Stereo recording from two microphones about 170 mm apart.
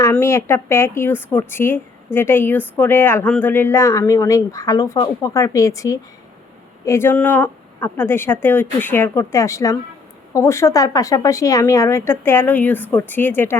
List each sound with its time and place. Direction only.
0.0 s speech: 15° left (ahead or behind)